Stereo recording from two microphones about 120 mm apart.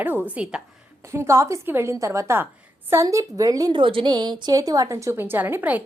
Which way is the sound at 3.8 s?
45° right (ahead or behind).